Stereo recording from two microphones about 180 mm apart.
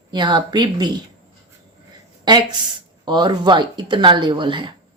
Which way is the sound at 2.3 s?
25° right (ahead or behind).